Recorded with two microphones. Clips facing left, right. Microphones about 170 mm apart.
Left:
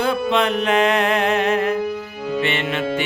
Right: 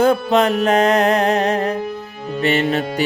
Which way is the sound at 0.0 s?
45° right (ahead or behind).